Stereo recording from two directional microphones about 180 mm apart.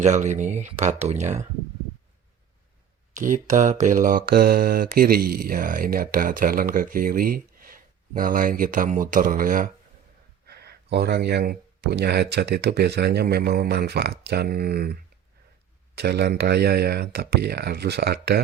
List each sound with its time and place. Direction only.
0.0 s speech: 40° right (ahead or behind)
3.2 s speech: 45° right (ahead or behind)
10.4 s speech: 65° right (ahead or behind)
16.0 s speech: 65° right (ahead or behind)